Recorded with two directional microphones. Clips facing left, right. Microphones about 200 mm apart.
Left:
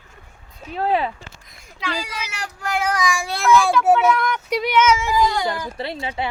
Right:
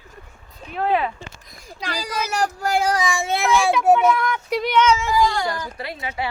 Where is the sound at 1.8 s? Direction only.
40° right (ahead or behind); by 3.8 s 20° right (ahead or behind).